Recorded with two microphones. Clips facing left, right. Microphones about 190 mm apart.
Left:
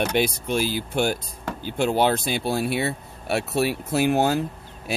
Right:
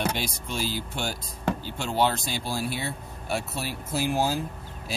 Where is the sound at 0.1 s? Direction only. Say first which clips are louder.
Left 9 dB; 60° left (ahead or behind).